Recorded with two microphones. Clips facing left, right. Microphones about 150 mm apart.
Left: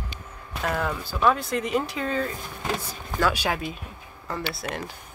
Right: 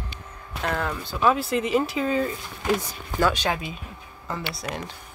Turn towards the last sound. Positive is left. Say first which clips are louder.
# left 1 dB
turn(degrees=0)  # may be behind; listen again after turning